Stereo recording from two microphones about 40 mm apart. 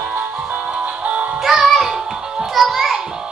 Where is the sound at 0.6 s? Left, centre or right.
Right.